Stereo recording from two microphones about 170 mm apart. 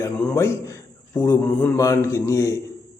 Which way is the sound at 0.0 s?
15° left (ahead or behind).